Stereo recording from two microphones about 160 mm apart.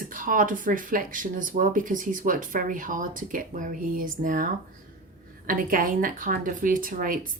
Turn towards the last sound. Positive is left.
turn(degrees=-55)  # may be behind; listen again after turning